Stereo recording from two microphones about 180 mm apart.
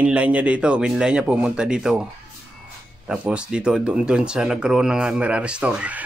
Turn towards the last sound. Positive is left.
turn(degrees=-5)  # may be behind; listen again after turning